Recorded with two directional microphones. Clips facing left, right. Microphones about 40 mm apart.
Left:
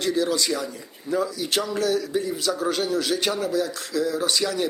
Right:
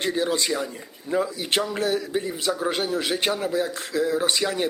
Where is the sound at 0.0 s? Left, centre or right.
Right.